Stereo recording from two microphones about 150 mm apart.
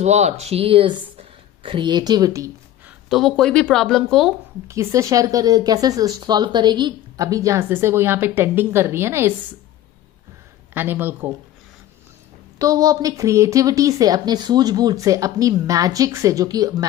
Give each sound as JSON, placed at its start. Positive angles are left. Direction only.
{"t": 0.0, "sound": "speech", "side_deg": -50}
{"t": 3.1, "sound": "a woman's voice", "side_deg": 0}
{"t": 4.6, "sound": "speech", "side_deg": -20}
{"t": 10.7, "sound": "speech", "side_deg": -15}
{"t": 12.5, "sound": "speech", "side_deg": -25}